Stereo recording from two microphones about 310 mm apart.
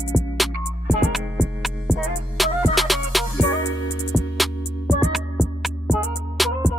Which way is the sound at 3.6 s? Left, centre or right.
Left.